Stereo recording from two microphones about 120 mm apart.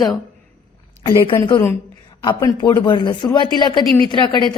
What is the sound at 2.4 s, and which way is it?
Speech, 30° left (ahead or behind).